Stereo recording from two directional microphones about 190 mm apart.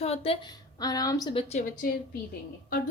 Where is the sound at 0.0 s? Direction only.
30° left (ahead or behind).